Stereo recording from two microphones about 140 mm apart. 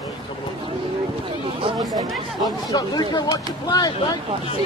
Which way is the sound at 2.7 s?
30° left (ahead or behind).